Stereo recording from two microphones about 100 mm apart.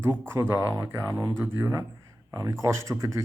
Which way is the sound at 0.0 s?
25° right (ahead or behind).